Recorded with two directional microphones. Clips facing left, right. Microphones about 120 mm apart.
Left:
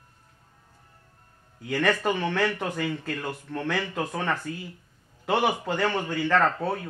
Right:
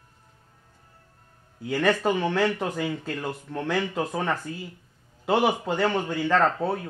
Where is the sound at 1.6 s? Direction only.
15° right (ahead or behind).